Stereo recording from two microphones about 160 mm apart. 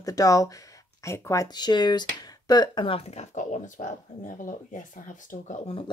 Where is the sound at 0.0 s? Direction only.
20° left (ahead or behind); by 5.8 s 50° left (ahead or behind).